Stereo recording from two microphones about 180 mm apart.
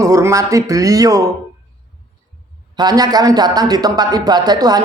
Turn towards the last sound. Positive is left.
turn(degrees=-20)  # may be behind; listen again after turning